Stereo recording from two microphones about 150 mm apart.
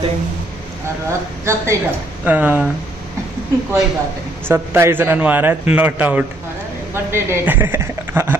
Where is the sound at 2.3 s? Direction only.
10° right (ahead or behind).